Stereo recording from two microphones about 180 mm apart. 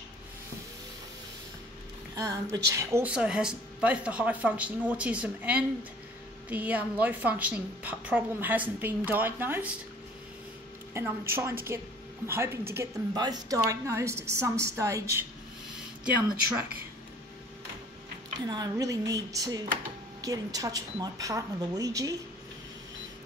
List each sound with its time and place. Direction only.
2.1 s speech: 20° right (ahead or behind)
10.9 s speech: 15° right (ahead or behind)
18.4 s a woman's voice: 20° right (ahead or behind)